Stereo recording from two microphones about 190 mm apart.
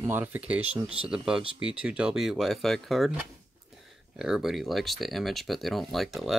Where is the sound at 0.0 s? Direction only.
10° right (ahead or behind).